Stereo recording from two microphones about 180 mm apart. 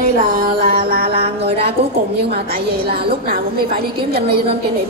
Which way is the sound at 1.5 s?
30° right (ahead or behind).